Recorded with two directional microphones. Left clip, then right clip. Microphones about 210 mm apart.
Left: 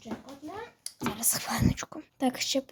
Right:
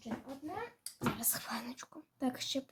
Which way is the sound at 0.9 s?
30° left (ahead or behind).